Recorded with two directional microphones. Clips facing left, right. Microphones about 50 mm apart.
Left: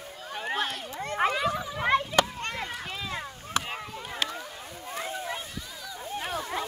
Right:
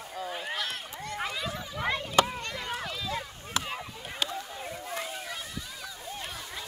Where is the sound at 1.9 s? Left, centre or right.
Left.